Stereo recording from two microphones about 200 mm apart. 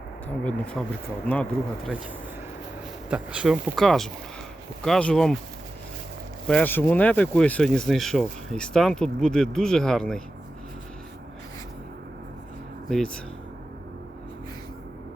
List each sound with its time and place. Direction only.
0.3 s speech: 5° left (ahead or behind)
3.1 s speech: 5° right (ahead or behind)
6.5 s speech: 10° left (ahead or behind)